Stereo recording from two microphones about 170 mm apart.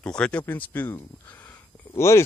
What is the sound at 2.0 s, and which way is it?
Speech, 15° left (ahead or behind).